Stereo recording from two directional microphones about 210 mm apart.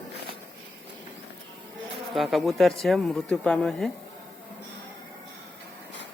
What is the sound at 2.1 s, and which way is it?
Speech, centre (ahead or behind).